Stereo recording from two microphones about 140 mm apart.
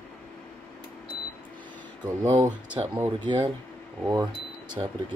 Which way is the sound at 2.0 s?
25° right (ahead or behind).